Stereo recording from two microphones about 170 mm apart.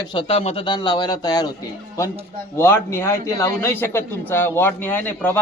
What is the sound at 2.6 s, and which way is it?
A man's voice, 15° left (ahead or behind).